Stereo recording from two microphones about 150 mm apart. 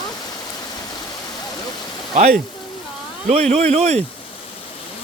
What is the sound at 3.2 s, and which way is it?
Speech, 50° right (ahead or behind).